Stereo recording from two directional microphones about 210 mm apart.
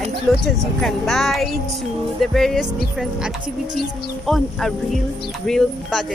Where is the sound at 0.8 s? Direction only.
Centre (ahead or behind).